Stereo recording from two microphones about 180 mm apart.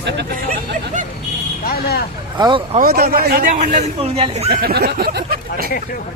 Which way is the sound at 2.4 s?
25° right (ahead or behind).